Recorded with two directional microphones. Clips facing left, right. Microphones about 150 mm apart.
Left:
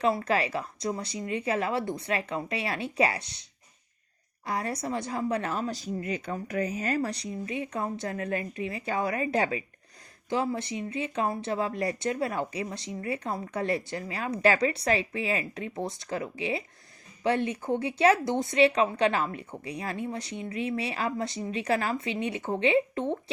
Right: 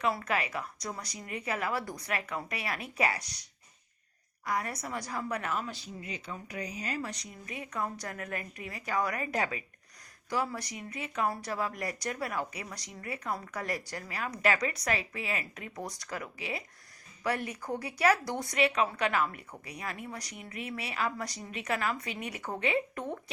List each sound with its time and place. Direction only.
0.3 s speech: 30° left (ahead or behind)
4.4 s speech: 30° left (ahead or behind)